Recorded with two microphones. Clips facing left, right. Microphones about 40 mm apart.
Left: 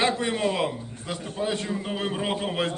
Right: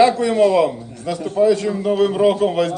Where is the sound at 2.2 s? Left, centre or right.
Left.